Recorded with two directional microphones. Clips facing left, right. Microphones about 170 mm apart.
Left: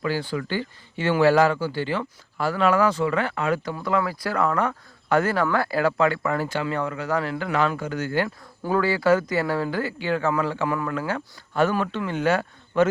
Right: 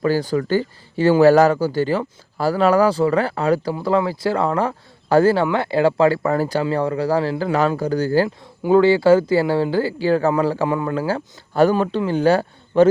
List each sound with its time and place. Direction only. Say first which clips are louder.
0.0 s speech: right 7 dB; 40° right (ahead or behind)